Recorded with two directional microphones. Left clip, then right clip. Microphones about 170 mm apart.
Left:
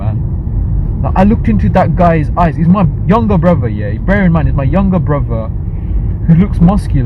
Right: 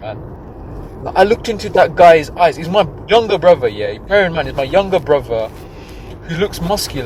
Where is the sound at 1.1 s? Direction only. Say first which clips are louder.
Right 2 dB; 15° right (ahead or behind).